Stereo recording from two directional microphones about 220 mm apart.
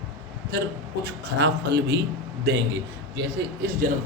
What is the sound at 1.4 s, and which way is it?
Speech, 50° right (ahead or behind).